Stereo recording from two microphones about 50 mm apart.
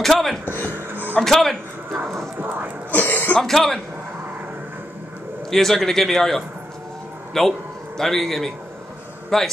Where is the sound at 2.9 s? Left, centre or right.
Left.